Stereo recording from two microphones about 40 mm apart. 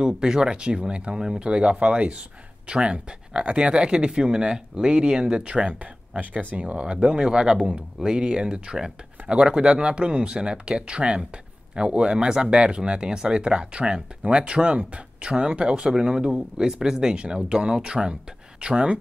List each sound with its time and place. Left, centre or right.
0.0 s speech: centre